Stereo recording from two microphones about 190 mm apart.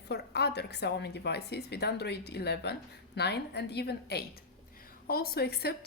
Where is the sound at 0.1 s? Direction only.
60° left (ahead or behind).